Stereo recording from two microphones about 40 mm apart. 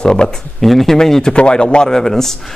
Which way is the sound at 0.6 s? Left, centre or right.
Centre.